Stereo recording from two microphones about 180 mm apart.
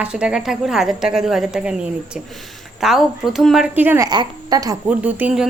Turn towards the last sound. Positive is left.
turn(degrees=-10)  # may be behind; listen again after turning